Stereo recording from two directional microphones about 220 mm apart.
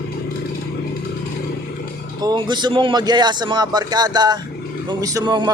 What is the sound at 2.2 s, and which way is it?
A man's voice, 20° right (ahead or behind).